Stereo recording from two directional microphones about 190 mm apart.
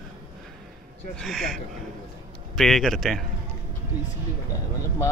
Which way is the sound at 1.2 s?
Centre (ahead or behind).